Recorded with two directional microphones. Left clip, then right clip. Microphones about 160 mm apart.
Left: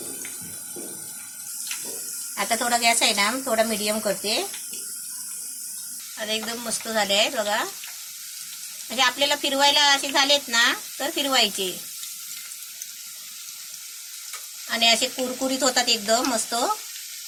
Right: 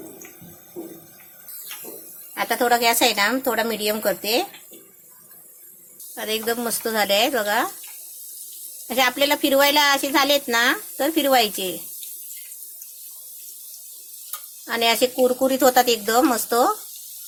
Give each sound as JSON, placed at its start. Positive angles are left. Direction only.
{"t": 2.3, "sound": "speech", "side_deg": -60}
{"t": 6.1, "sound": "speech", "side_deg": -65}
{"t": 9.0, "sound": "a woman's voice", "side_deg": -65}
{"t": 14.7, "sound": "speech", "side_deg": -70}